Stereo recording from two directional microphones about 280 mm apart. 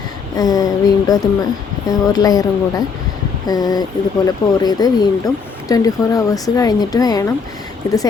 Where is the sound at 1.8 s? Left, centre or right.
Centre.